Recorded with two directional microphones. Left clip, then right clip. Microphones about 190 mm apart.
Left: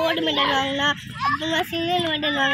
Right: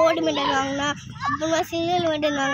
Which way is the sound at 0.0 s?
20° right (ahead or behind).